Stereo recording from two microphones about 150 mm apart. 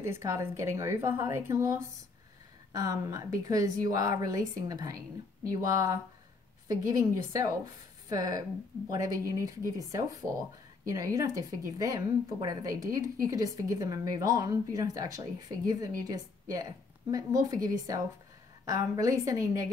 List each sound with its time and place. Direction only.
0.0 s a woman's voice: 15° right (ahead or behind)